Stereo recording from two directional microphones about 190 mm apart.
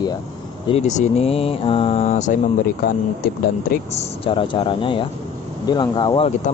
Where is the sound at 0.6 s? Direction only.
35° left (ahead or behind).